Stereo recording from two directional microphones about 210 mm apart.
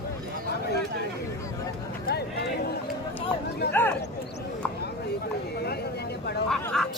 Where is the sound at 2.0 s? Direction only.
50° left (ahead or behind).